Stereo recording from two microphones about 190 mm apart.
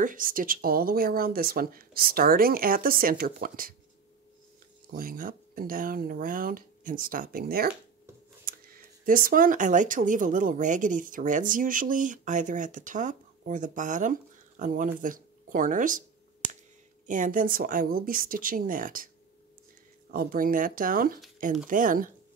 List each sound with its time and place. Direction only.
0.0 s speech: 45° right (ahead or behind)
4.9 s speech: 50° right (ahead or behind)
14.6 s a sound: 45° right (ahead or behind)
17.0 s speech: 45° right (ahead or behind)
20.1 s speech: 50° right (ahead or behind)